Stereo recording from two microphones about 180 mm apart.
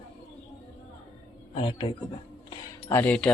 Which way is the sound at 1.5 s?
30° left (ahead or behind).